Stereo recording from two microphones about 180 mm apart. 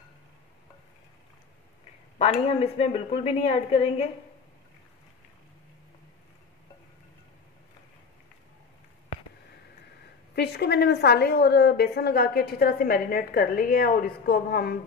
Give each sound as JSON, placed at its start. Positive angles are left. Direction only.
{"t": 2.1, "sound": "a woman's voice", "side_deg": 35}
{"t": 10.3, "sound": "a woman's voice", "side_deg": 65}